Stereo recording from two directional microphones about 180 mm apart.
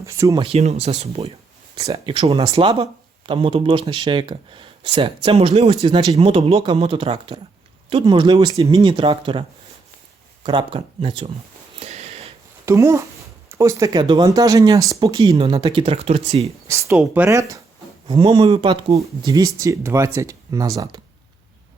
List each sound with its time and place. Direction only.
0.0 s speech: 15° right (ahead or behind)
0.4 s speech: 35° right (ahead or behind)
1.7 s speech: 20° right (ahead or behind)
10.4 s speech: 25° right (ahead or behind)
11.8 s a sound: 35° right (ahead or behind)
12.6 s speech: 15° right (ahead or behind)
15.4 s speech: 30° right (ahead or behind)
16.6 s speech: 15° right (ahead or behind)
18.1 s speech: 25° right (ahead or behind)